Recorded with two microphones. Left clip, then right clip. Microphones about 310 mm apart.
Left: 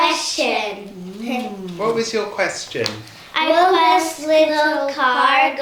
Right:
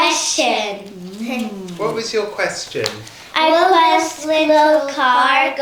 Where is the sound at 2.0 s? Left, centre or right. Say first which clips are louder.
Even; left.